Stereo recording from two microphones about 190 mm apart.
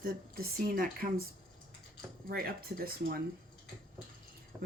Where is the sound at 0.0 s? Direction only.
50° right (ahead or behind).